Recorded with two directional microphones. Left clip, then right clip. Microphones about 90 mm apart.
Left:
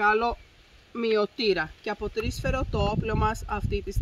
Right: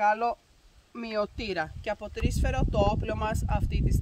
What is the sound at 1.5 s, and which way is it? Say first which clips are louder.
Speech: left 4 dB; 50° right (ahead or behind).